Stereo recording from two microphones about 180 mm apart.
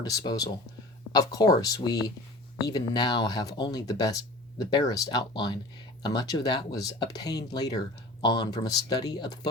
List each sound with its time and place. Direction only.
0.0 s speech: 20° left (ahead or behind)